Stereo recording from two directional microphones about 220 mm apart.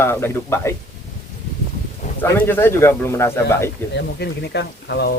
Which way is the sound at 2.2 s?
10° left (ahead or behind).